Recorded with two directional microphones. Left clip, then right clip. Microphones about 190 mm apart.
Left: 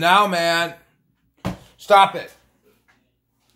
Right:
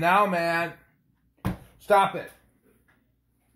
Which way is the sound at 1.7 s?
10° right (ahead or behind).